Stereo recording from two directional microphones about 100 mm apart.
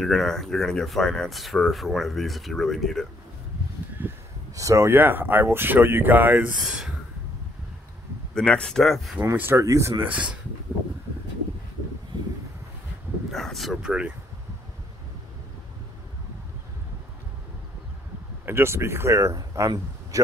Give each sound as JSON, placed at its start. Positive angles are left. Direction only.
{"t": 0.0, "sound": "speech", "side_deg": 0}
{"t": 4.0, "sound": "a sound", "side_deg": -20}
{"t": 4.6, "sound": "speech", "side_deg": -30}
{"t": 6.6, "sound": "speech", "side_deg": -5}
{"t": 8.4, "sound": "speech", "side_deg": 10}
{"t": 9.1, "sound": "speech", "side_deg": -20}
{"t": 13.3, "sound": "speech", "side_deg": 0}
{"t": 18.4, "sound": "speech", "side_deg": -25}